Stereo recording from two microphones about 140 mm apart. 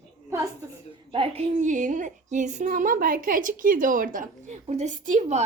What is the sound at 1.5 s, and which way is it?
A woman's voice, 65° right (ahead or behind).